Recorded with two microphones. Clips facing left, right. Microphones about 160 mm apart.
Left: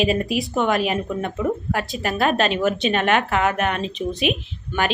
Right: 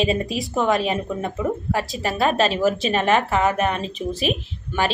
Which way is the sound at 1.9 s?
Centre (ahead or behind).